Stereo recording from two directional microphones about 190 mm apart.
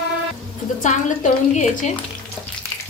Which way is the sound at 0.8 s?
40° left (ahead or behind).